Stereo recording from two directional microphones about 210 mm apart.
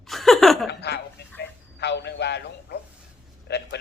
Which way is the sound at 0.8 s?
50° left (ahead or behind).